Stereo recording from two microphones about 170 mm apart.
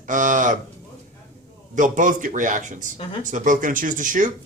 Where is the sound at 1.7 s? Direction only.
50° right (ahead or behind).